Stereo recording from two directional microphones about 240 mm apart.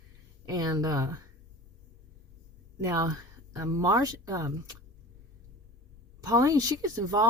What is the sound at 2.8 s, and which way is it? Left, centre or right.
Speech, centre.